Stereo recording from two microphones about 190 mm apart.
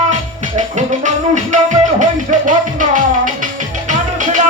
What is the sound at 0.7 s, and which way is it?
Music, 40° right (ahead or behind).